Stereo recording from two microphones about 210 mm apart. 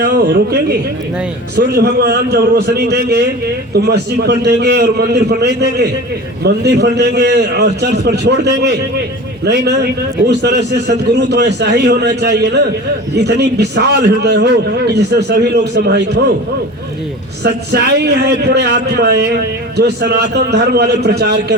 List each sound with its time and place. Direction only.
0.0 s a man's voice: 50° right (ahead or behind)
17.4 s a man's voice: 50° right (ahead or behind)